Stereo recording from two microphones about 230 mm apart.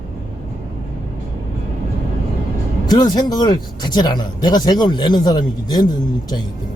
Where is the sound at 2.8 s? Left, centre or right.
Centre.